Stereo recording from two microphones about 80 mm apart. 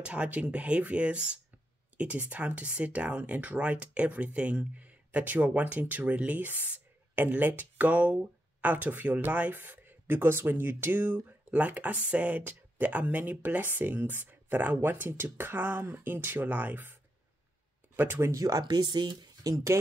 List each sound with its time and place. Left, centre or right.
0.0 s speech: centre; by 18.7 s right
18.7 s speech: right
19.4 s speech: right